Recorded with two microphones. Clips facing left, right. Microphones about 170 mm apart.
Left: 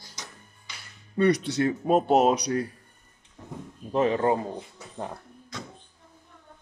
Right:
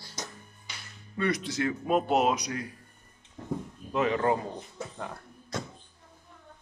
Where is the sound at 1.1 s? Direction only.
35° left (ahead or behind).